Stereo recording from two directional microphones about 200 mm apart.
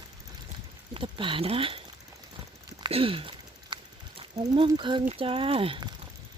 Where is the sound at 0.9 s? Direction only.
25° right (ahead or behind).